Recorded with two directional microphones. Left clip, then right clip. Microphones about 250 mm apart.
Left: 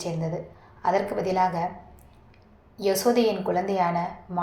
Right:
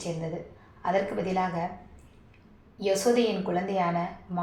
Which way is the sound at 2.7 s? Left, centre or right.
Left.